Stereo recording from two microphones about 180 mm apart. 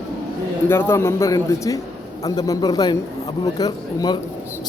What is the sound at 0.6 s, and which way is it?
A man's voice, 15° left (ahead or behind).